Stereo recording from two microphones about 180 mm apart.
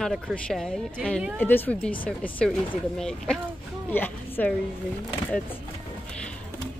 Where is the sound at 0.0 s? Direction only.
5° left (ahead or behind).